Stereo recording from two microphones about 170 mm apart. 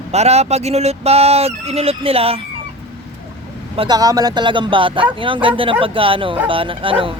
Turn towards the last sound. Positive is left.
turn(degrees=-30)  # may be behind; listen again after turning